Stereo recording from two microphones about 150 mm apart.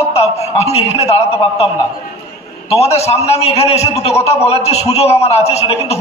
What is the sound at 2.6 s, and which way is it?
A man's voice, 45° left (ahead or behind).